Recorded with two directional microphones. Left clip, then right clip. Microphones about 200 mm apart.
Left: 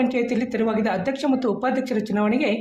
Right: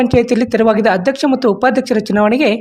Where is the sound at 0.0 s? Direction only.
45° right (ahead or behind).